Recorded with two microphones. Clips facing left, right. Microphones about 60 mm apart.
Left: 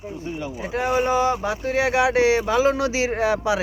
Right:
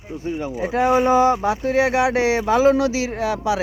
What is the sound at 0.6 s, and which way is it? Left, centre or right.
Speech, right.